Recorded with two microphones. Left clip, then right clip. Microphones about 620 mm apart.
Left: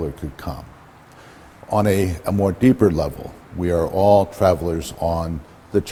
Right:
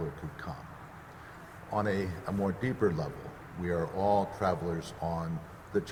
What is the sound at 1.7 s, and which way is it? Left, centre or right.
Speech, left.